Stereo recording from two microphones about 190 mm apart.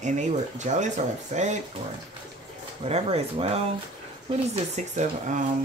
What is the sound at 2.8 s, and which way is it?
Speech, 30° right (ahead or behind).